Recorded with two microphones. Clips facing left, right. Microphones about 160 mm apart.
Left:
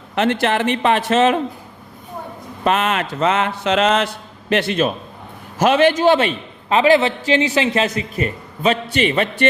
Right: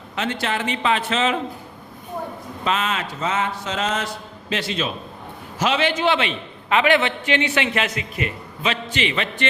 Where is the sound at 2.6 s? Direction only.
60° left (ahead or behind); by 9.3 s 40° left (ahead or behind).